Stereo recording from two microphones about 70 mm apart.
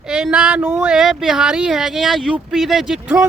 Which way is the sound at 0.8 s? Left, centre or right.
Centre.